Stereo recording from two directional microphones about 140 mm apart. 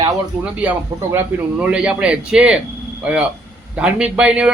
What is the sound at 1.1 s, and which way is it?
A man's voice, 10° right (ahead or behind).